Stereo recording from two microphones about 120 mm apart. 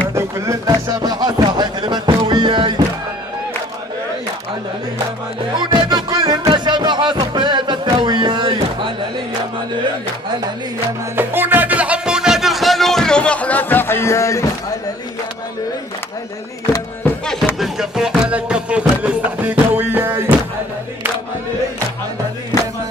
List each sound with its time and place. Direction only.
0.1 s music: 25° right (ahead or behind); by 2.7 s 40° right (ahead or behind)
5.7 s music: 40° right (ahead or behind)
11.1 s music: 15° right (ahead or behind); by 14.5 s 25° left (ahead or behind)
17.6 s music: 5° right (ahead or behind)